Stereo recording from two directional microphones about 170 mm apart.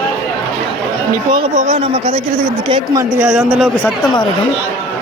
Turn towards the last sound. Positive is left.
turn(degrees=-5)  # may be behind; listen again after turning